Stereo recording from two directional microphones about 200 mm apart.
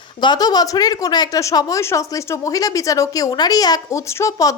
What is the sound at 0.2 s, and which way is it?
A woman's voice, 20° left (ahead or behind).